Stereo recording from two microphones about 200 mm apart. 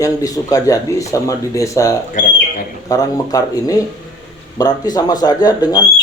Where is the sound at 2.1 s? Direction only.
40° left (ahead or behind).